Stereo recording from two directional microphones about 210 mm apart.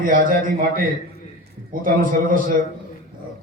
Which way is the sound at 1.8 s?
40° right (ahead or behind).